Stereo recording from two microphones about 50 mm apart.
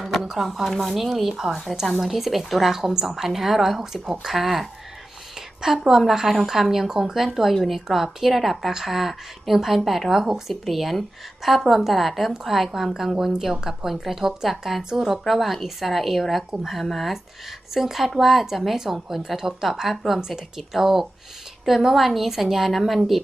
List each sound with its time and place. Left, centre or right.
0.0 s a woman's voice: centre